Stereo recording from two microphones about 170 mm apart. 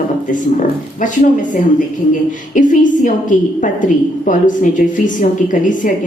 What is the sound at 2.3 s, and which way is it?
A woman's voice, 50° left (ahead or behind).